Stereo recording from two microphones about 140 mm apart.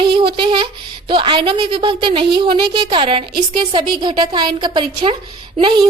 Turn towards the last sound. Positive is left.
turn(degrees=-35)  # may be behind; listen again after turning